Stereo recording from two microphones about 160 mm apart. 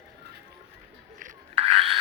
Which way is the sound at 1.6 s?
35° right (ahead or behind).